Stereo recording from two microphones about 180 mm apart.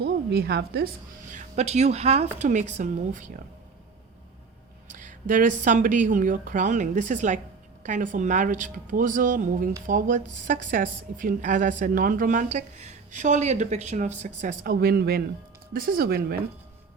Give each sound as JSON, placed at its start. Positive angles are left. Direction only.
{"t": 0.0, "sound": "a woman's voice", "side_deg": -65}
{"t": 1.3, "sound": "a woman's voice", "side_deg": -40}
{"t": 4.9, "sound": "a woman's voice", "side_deg": -45}